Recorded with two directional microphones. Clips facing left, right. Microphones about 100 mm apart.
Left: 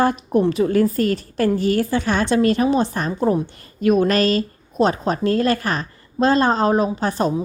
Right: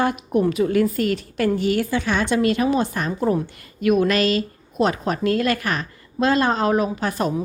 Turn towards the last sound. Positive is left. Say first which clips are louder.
# left 2 dB
turn(degrees=30)  # may be behind; listen again after turning